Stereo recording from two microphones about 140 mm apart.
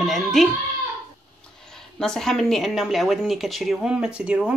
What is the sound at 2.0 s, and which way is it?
Speech, 5° left (ahead or behind).